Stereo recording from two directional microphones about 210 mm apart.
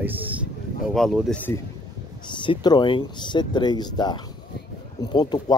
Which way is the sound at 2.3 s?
20° left (ahead or behind).